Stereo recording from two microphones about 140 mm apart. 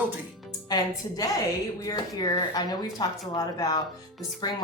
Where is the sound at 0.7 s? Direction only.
30° left (ahead or behind).